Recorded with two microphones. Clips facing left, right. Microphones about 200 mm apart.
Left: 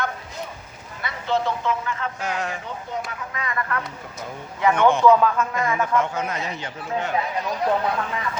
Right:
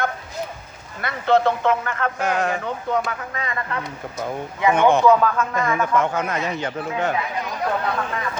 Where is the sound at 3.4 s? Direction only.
25° right (ahead or behind).